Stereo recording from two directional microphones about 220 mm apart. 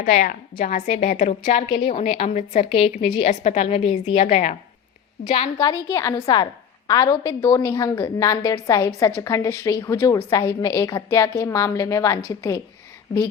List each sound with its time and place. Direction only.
0.0 s a woman's voice: 40° left (ahead or behind)
0.5 s a woman's voice: 30° left (ahead or behind)